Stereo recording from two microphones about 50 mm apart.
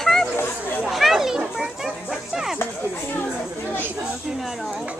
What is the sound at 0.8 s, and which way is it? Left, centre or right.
Children playing, centre.